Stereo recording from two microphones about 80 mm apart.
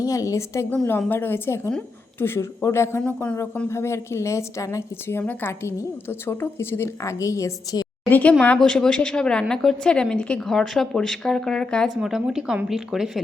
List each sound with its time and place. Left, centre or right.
0.0 s a woman's voice: left
0.9 s a woman's voice: left
3.0 s a woman's voice: centre; by 5.2 s left
5.2 s a woman's voice: left
7.0 s a woman's voice: left
8.1 s a woman's voice: centre
11.9 s speech: centre